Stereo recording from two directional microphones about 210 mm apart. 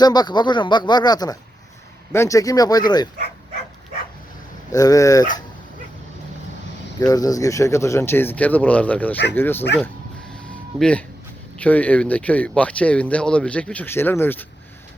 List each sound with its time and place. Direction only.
0.0 s speech: 20° left (ahead or behind)
4.7 s speech: 15° left (ahead or behind)
7.1 s speech: 15° left (ahead or behind)
10.8 s speech: 5° left (ahead or behind)